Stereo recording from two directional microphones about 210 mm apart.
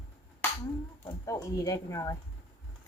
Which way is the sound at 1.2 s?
15° left (ahead or behind).